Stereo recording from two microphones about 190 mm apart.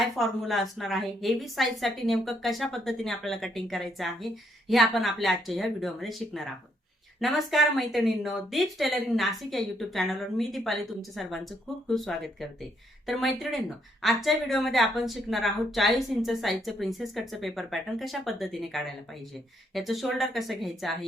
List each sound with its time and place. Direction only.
0.0 s a woman's voice: centre (ahead or behind)